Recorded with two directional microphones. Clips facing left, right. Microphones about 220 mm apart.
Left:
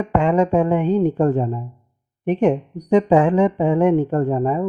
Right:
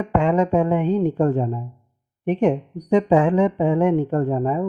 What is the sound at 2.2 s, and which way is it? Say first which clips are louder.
Speech: left 2 dB; 50° left (ahead or behind).